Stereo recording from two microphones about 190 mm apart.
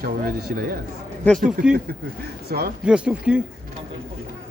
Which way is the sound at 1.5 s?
5° right (ahead or behind).